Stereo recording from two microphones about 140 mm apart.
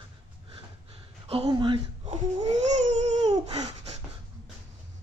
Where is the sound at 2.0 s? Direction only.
55° right (ahead or behind).